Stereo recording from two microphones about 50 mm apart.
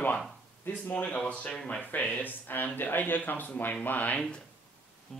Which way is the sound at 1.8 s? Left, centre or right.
Left.